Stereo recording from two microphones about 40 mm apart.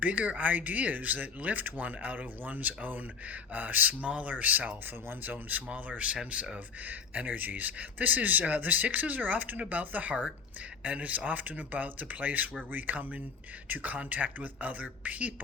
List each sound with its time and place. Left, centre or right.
0.0 s speech: right
4.0 s a man's voice: right